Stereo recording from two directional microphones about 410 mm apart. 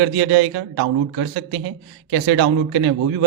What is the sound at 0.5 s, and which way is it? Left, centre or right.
Speech, right.